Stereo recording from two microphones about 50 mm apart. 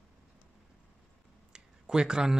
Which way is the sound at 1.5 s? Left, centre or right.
Centre.